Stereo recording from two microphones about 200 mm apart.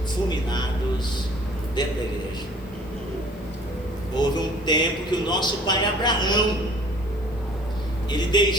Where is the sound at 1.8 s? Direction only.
20° left (ahead or behind).